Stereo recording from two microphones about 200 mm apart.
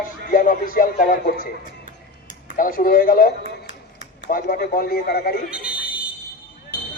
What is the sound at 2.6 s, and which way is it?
A man's voice, 45° left (ahead or behind).